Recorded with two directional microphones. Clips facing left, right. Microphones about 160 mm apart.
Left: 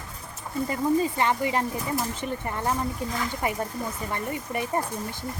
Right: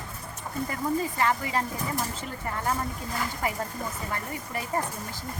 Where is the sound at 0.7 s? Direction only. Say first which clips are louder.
Left 6 dB; 25° left (ahead or behind).